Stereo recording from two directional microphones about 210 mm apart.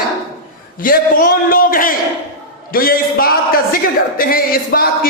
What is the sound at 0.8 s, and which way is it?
A man's voice, 40° left (ahead or behind).